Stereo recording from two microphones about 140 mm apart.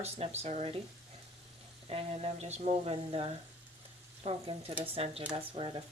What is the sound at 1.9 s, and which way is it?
Speech, 45° right (ahead or behind).